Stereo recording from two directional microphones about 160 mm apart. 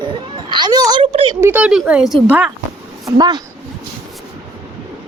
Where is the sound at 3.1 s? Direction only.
25° right (ahead or behind).